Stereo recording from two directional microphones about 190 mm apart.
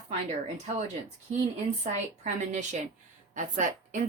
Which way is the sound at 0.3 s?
35° right (ahead or behind).